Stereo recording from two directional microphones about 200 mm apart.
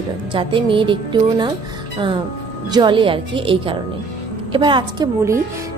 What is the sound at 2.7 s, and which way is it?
A woman's voice, 25° right (ahead or behind).